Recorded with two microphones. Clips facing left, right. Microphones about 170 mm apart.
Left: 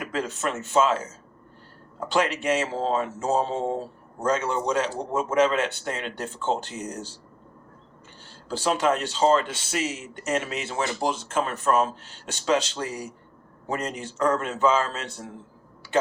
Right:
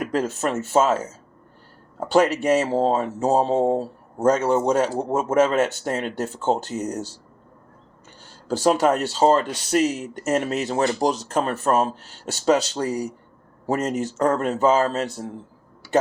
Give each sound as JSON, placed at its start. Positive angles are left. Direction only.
{"t": 0.0, "sound": "speech", "side_deg": -40}
{"t": 2.0, "sound": "speech", "side_deg": -35}
{"t": 8.2, "sound": "speech", "side_deg": -45}